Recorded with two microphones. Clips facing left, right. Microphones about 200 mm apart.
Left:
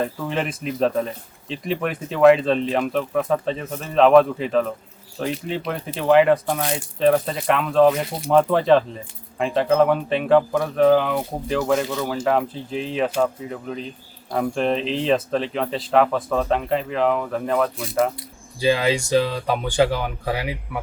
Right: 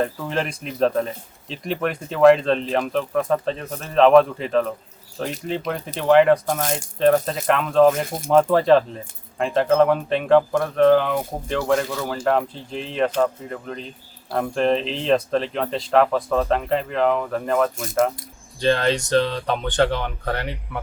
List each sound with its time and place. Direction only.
0.0 s speech: centre (ahead or behind)
8.0 s speech: 45° right (ahead or behind)
8.3 s speech: centre (ahead or behind)